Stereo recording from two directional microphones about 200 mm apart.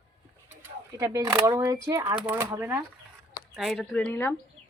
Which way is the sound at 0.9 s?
15° right (ahead or behind).